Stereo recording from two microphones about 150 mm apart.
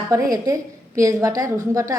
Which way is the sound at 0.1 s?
25° right (ahead or behind).